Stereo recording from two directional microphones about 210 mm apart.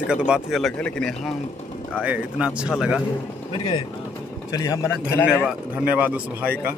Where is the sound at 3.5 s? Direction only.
25° left (ahead or behind).